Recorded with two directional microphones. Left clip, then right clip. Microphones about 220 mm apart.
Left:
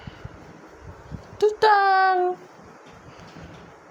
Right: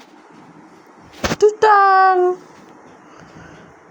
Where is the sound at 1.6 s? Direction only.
15° right (ahead or behind).